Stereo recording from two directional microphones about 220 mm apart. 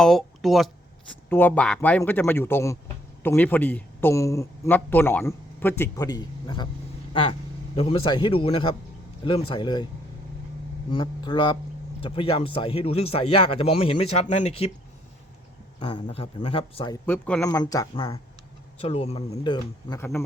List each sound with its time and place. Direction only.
0.0 s a sound: centre (ahead or behind)
1.3 s speech: 10° left (ahead or behind)
10.9 s speech: 20° left (ahead or behind)
15.8 s speech: 20° left (ahead or behind)
17.1 s speech: 5° left (ahead or behind); by 20.0 s 25° left (ahead or behind)
20.0 s speech: 10° left (ahead or behind)